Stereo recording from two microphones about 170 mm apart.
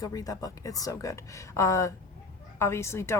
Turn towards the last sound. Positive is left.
turn(degrees=15)  # may be behind; listen again after turning